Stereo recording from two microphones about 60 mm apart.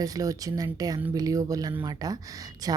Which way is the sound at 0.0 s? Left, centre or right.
Right.